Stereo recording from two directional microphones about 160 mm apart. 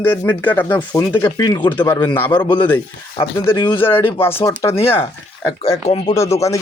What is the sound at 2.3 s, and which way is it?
Speech, 25° left (ahead or behind).